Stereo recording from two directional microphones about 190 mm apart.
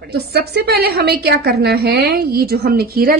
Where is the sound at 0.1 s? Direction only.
55° right (ahead or behind).